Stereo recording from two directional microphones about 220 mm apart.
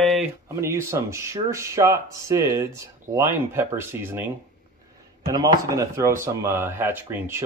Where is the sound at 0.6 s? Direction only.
10° right (ahead or behind).